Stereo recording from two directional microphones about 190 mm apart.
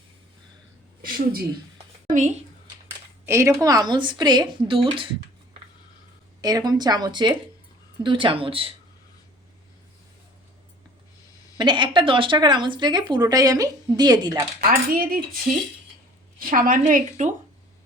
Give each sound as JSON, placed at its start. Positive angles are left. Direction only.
{"t": 1.0, "sound": "a woman's voice", "side_deg": -50}
{"t": 3.2, "sound": "speech", "side_deg": -15}
{"t": 6.4, "sound": "speech", "side_deg": -20}
{"t": 11.5, "sound": "speech", "side_deg": -25}
{"t": 14.7, "sound": "a woman's voice", "side_deg": -50}
{"t": 16.4, "sound": "a woman's voice", "side_deg": -45}